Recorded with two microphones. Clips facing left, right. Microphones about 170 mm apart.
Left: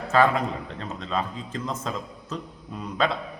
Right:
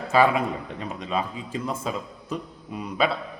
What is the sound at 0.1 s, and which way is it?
Speech, 10° right (ahead or behind).